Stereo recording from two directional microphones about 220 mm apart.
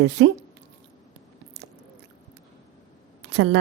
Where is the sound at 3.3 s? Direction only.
65° right (ahead or behind).